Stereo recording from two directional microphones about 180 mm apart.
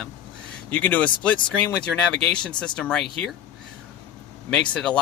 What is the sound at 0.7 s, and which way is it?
A man's voice, 10° left (ahead or behind).